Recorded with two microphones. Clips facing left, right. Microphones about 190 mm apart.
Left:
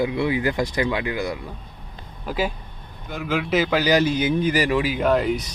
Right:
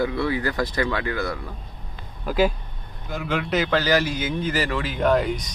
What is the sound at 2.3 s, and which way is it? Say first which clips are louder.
A man's voice: right 4 dB; centre (ahead or behind).